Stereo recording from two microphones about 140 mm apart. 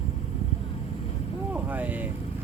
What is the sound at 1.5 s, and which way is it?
Speech, 10° right (ahead or behind).